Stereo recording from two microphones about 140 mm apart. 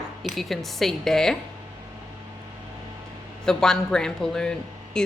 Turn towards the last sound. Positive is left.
turn(degrees=5)  # may be behind; listen again after turning